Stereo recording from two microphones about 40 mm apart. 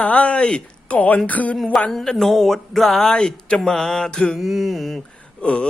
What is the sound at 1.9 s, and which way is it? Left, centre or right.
Speech, centre.